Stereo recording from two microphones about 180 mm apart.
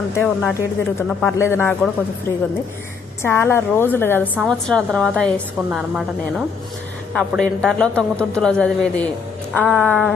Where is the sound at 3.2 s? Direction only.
15° left (ahead or behind).